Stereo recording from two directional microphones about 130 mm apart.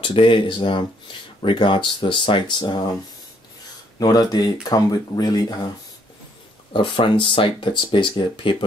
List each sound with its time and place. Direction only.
0.0 s speech: 40° left (ahead or behind)
4.0 s speech: 30° left (ahead or behind)
6.7 s speech: 40° left (ahead or behind)